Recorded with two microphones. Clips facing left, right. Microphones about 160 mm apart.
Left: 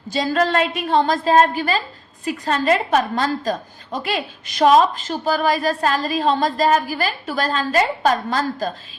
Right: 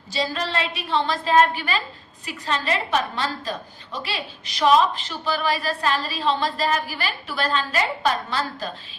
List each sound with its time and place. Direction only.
0.1 s a woman's voice: 50° left (ahead or behind)